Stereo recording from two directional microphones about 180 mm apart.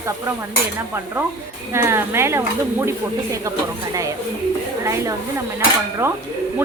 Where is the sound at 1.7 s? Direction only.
15° right (ahead or behind).